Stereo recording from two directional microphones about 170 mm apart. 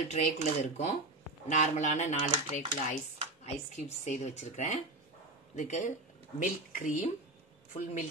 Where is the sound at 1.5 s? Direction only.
45° left (ahead or behind).